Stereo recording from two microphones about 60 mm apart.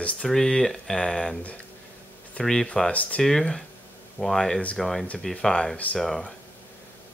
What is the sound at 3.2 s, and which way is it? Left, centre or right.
Speech, centre.